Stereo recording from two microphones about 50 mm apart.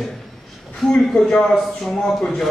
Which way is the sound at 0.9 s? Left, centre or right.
Centre.